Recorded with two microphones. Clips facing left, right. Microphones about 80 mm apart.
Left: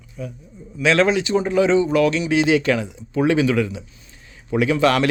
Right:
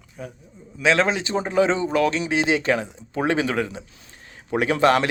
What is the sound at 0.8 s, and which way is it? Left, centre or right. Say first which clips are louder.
Speech: left 3 dB; right.